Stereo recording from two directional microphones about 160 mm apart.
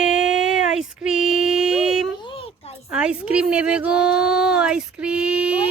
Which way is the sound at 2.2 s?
35° left (ahead or behind).